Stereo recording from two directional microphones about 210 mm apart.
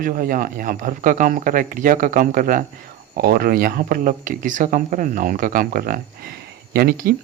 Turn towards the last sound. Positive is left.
turn(degrees=-45)  # may be behind; listen again after turning